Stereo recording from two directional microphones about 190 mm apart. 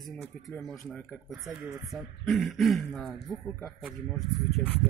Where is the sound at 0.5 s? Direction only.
Centre (ahead or behind).